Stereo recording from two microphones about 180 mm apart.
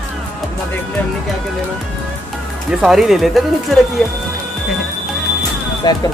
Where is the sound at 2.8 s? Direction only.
Centre (ahead or behind).